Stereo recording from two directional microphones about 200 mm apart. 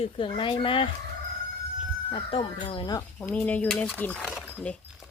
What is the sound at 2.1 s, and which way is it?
Speech, 30° left (ahead or behind).